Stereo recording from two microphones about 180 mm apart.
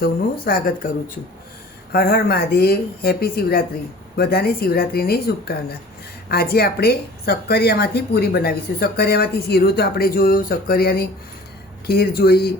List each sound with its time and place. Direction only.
0.4 s a woman's voice: 50° left (ahead or behind)